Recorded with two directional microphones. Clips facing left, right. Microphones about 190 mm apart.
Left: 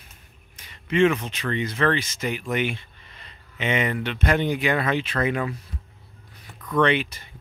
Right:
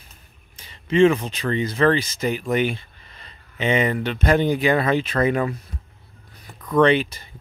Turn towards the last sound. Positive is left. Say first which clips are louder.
# right 4 dB
turn(degrees=-35)  # may be behind; listen again after turning